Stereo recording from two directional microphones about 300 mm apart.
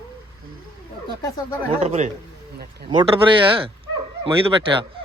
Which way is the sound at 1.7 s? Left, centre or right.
Right.